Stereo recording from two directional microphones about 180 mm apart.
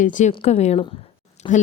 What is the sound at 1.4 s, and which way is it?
Speech, 25° left (ahead or behind).